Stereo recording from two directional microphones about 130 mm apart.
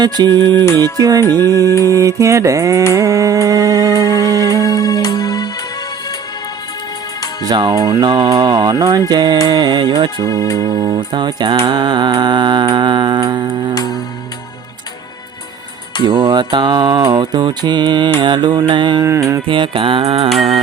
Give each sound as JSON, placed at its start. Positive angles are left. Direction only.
{"t": 0.0, "sound": "mantra", "side_deg": -35}
{"t": 0.6, "sound": "speech", "side_deg": 20}
{"t": 0.9, "sound": "a sound", "side_deg": -30}
{"t": 1.2, "sound": "music", "side_deg": 15}
{"t": 1.9, "sound": "a sound", "side_deg": -25}
{"t": 4.6, "sound": "music", "side_deg": 30}
{"t": 7.4, "sound": "speech", "side_deg": -30}
{"t": 7.9, "sound": "mantra", "side_deg": -30}
{"t": 10.2, "sound": "speech", "side_deg": 25}
{"t": 10.8, "sound": "mantra", "side_deg": -40}
{"t": 16.0, "sound": "mantra", "side_deg": -35}
{"t": 19.0, "sound": "a sound", "side_deg": -20}
{"t": 19.5, "sound": "mantra", "side_deg": -40}